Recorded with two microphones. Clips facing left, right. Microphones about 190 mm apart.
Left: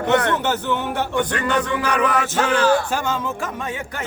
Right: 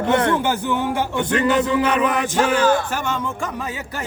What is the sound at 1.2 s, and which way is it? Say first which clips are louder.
Speech: right 5 dB; 25° right (ahead or behind).